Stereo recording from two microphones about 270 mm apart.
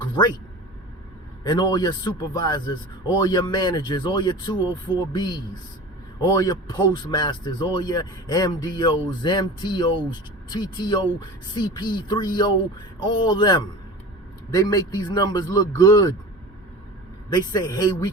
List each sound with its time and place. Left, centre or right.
1.5 s a man's voice: centre
17.2 s a man's voice: centre